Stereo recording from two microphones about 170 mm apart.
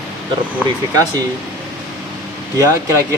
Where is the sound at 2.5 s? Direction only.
20° right (ahead or behind).